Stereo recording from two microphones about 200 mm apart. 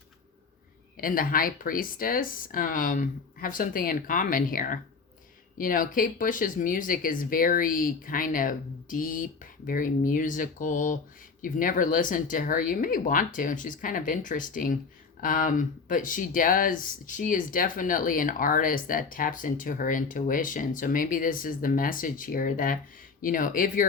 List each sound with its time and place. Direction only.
0.9 s speech: 45° left (ahead or behind)